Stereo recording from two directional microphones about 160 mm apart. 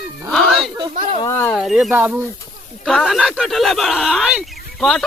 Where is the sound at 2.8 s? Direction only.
Centre (ahead or behind).